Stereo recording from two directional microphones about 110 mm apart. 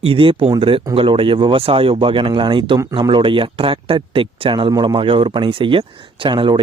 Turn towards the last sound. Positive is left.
turn(degrees=-50)  # may be behind; listen again after turning